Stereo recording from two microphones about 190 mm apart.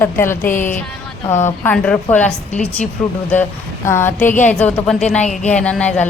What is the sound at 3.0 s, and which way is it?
Music, 5° left (ahead or behind).